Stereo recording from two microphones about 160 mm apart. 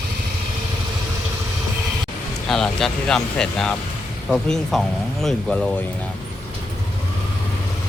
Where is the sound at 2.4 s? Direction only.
Centre (ahead or behind).